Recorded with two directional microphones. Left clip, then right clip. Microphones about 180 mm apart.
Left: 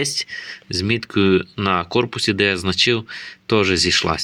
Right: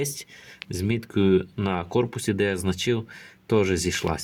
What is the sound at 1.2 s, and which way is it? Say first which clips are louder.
Speech: left 4 dB; 15° left (ahead or behind).